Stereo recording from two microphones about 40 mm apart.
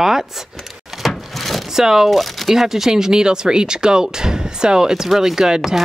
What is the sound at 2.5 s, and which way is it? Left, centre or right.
Speech, centre.